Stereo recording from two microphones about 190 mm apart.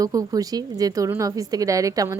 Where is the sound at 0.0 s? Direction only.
20° right (ahead or behind).